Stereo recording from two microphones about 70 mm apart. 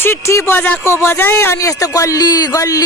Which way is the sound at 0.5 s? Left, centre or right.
Left.